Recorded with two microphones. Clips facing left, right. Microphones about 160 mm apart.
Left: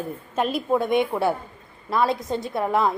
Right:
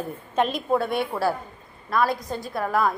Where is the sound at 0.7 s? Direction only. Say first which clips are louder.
Left 3 dB; 15° left (ahead or behind).